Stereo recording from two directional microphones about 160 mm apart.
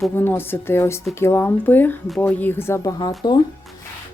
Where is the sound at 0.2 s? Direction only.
15° left (ahead or behind).